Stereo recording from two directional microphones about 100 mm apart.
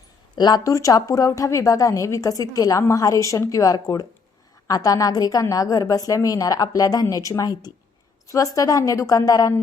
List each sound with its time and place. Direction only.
0.3 s a woman's voice: 45° left (ahead or behind)